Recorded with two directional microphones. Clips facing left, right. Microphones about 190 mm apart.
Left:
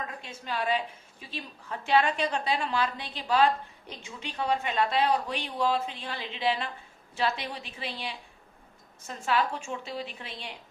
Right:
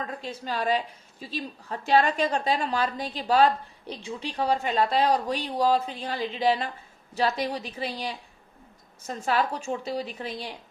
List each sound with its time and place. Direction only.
0.0 s a woman's voice: 35° right (ahead or behind)